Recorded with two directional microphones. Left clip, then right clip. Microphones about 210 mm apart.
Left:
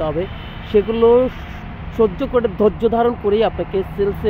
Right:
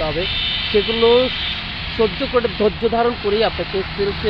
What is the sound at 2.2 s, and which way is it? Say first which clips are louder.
Speech: left 1 dB; 25° left (ahead or behind).